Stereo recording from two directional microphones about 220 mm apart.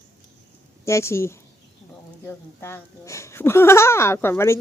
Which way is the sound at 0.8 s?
10° left (ahead or behind).